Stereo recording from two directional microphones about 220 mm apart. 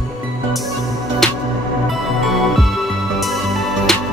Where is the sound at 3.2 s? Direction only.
Centre (ahead or behind).